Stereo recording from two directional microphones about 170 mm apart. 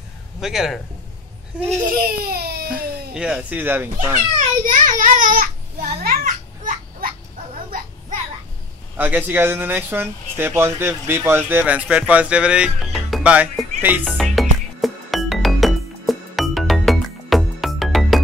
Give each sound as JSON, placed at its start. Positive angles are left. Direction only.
{"t": 0.4, "sound": "speech", "side_deg": 0}
{"t": 2.0, "sound": "baby cry", "side_deg": -65}
{"t": 3.2, "sound": "speech", "side_deg": -5}
{"t": 4.6, "sound": "a sound", "side_deg": -50}
{"t": 8.9, "sound": "speech", "side_deg": -10}
{"t": 14.0, "sound": "music", "side_deg": 5}